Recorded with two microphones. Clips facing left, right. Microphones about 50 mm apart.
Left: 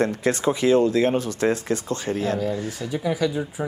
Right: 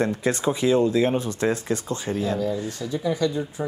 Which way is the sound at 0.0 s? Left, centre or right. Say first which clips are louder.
Left 1 dB; left.